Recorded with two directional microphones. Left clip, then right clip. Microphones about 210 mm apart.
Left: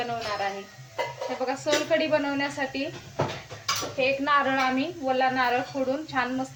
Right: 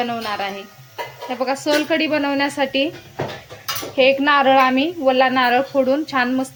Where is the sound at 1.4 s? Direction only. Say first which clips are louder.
Right 8 dB; 45° right (ahead or behind).